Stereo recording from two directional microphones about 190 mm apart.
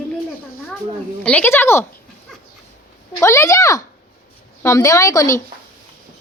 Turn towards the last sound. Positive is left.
turn(degrees=15)  # may be behind; listen again after turning